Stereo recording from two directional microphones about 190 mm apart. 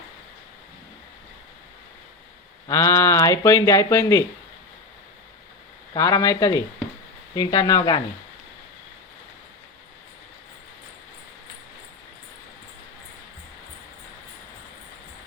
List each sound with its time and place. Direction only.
2.6 s speech: 15° left (ahead or behind)
5.9 s speech: 20° left (ahead or behind)